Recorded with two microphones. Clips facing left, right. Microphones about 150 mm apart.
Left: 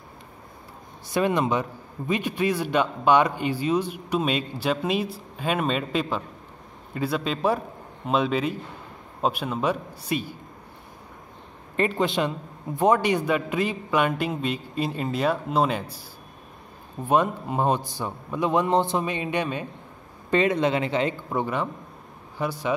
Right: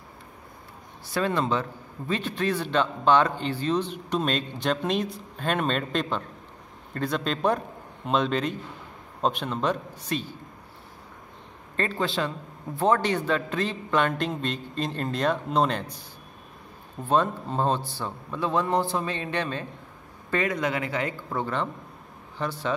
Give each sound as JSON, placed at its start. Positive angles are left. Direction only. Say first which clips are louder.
{"t": 1.1, "sound": "a man's voice", "louder": "left 3 dB", "side_deg": 15}
{"t": 11.7, "sound": "a man's voice", "louder": "left 4 dB", "side_deg": 15}
{"t": 17.0, "sound": "a man's voice", "louder": "left 2 dB", "side_deg": 15}
{"t": 20.2, "sound": "a man's voice", "louder": "left 5 dB", "side_deg": 25}